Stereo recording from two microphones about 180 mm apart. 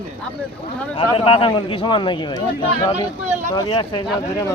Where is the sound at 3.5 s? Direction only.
25° left (ahead or behind).